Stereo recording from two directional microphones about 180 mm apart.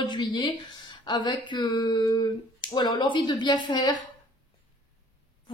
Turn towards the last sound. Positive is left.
turn(degrees=25)  # may be behind; listen again after turning